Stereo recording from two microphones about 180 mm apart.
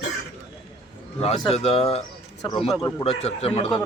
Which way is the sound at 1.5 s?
35° left (ahead or behind).